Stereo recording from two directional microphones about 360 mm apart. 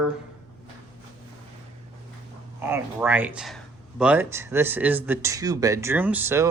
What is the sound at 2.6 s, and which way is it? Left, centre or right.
Speech, centre.